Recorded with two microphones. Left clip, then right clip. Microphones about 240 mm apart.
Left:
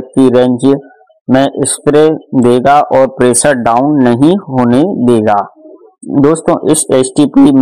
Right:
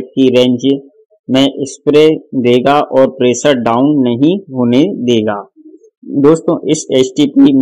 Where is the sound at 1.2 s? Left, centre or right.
Left.